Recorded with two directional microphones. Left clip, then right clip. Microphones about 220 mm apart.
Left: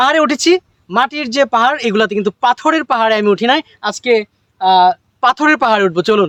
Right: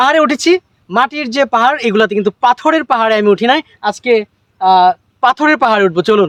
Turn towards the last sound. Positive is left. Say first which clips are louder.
# right 1 dB
turn(degrees=0)  # may be behind; listen again after turning